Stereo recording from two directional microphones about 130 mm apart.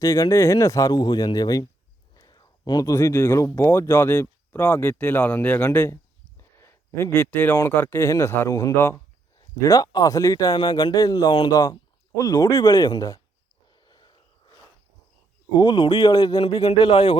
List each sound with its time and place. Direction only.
0.0 s speech: 25° left (ahead or behind)
13.8 s a sound: 35° left (ahead or behind)
15.5 s speech: 35° left (ahead or behind)
16.1 s speech: 30° left (ahead or behind)